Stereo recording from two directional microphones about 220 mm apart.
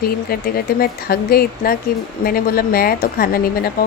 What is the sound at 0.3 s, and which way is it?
Speech, 45° left (ahead or behind).